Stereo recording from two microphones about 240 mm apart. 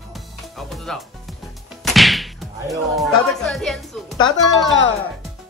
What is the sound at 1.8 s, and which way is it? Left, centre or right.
Whip, centre.